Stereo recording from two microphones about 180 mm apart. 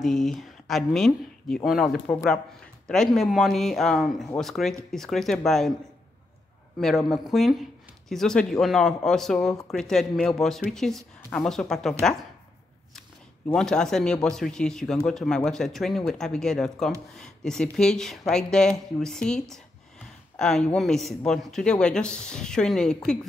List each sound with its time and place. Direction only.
0.0 s speech: centre (ahead or behind)
7.1 s speech: centre (ahead or behind)
13.5 s speech: 5° left (ahead or behind)